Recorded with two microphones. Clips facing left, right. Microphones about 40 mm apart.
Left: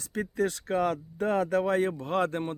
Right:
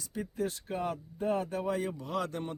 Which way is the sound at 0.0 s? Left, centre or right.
Left.